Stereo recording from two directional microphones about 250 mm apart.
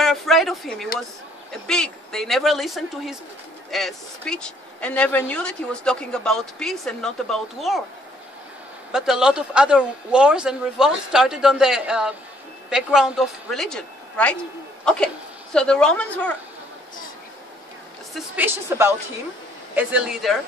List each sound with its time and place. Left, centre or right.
0.0 s a sound: centre
1.5 s speech: centre
8.9 s a woman's voice: centre
15.5 s speech: centre
18.1 s a woman's voice: centre